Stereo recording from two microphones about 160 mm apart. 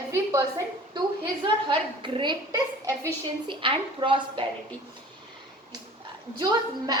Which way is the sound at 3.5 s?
30° right (ahead or behind).